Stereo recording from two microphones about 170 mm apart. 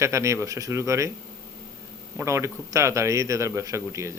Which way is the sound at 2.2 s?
15° right (ahead or behind).